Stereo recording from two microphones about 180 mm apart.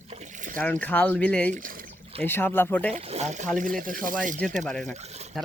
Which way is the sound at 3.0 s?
40° right (ahead or behind).